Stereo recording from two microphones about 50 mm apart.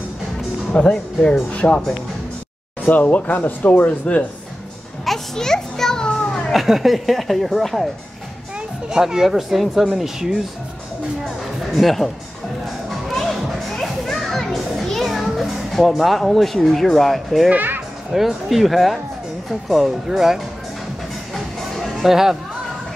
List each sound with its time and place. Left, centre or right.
0.8 s speech: centre
1.5 s speech: left
2.8 s speech: left
5.0 s children playing: centre
6.5 s speech: centre
8.8 s speech: centre
11.7 s speech: centre
12.9 s children playing: centre
17.5 s a child's voice: right
18.1 s speech: centre
21.5 s music: centre
22.0 s speech: centre